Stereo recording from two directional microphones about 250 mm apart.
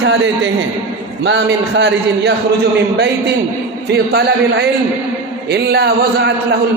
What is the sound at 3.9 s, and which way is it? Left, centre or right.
A man's voice, right.